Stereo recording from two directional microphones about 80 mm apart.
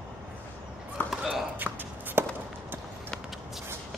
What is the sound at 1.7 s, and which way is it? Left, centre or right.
Walk, right.